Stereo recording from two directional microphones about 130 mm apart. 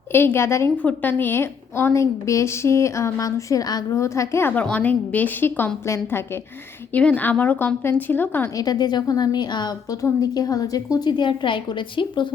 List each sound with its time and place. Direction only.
0.1 s a woman's voice: 15° left (ahead or behind)
8.5 s a woman's voice: 30° left (ahead or behind)